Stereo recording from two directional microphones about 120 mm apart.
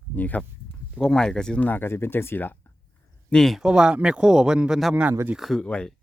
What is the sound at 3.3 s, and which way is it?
Speech, 5° left (ahead or behind).